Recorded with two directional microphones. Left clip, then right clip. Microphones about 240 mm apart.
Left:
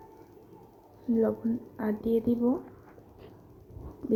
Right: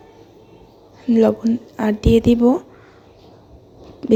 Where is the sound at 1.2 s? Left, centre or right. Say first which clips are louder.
Right 13 dB; right.